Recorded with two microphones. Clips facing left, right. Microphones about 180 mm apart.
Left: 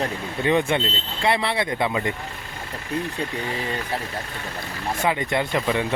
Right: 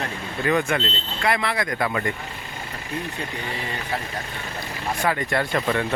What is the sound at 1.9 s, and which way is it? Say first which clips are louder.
Speech: left 1 dB; 15° left (ahead or behind).